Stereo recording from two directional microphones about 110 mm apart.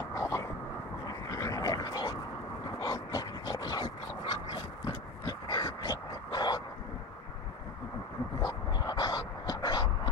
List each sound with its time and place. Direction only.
0.1 s vehicle: 30° left (ahead or behind)
1.0 s dog: 35° left (ahead or behind)
2.8 s a sound: 35° left (ahead or behind)
8.4 s dog: 35° left (ahead or behind)